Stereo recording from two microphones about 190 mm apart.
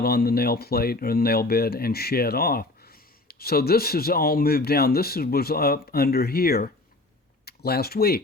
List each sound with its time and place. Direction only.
0.0 s speech: 55° left (ahead or behind)